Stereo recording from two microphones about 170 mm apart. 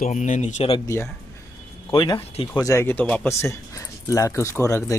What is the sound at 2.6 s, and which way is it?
Speech, 15° left (ahead or behind).